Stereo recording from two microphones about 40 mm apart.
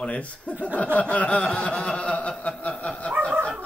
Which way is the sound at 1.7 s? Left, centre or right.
Left.